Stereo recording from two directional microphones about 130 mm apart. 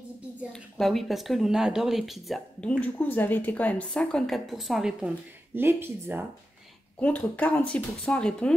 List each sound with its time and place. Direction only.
0.5 s speech: centre (ahead or behind)
5.5 s speech: 15° right (ahead or behind)
7.0 s speech: 10° left (ahead or behind)